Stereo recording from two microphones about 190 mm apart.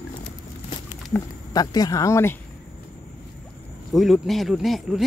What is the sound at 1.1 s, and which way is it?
Speech, 20° left (ahead or behind).